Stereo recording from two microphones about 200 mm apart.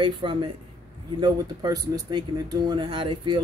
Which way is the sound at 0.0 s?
25° right (ahead or behind).